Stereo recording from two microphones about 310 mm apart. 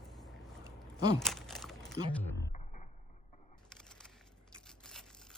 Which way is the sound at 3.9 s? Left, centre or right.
Centre.